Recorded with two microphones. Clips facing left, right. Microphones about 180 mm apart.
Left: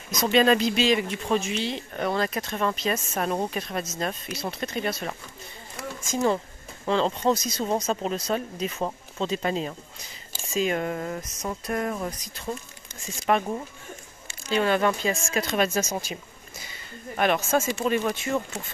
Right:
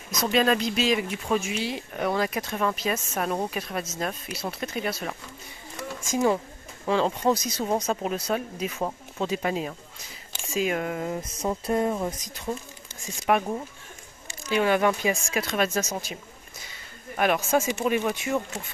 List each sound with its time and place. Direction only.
0.2 s speech: centre (ahead or behind)
11.1 s a sound: 30° right (ahead or behind)
13.3 s speech: 10° right (ahead or behind)
15.4 s speech: centre (ahead or behind)
17.2 s speech: 10° right (ahead or behind)